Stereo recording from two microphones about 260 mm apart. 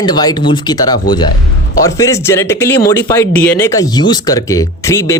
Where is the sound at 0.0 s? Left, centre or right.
Centre.